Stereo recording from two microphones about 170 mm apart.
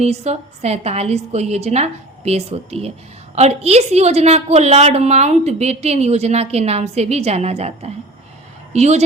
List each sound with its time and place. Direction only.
0.0 s a woman's voice: 40° right (ahead or behind)